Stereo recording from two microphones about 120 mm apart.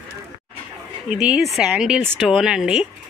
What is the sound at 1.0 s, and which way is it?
Speech, 10° right (ahead or behind).